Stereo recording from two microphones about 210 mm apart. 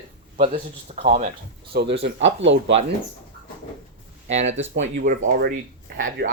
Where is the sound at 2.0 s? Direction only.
60° right (ahead or behind).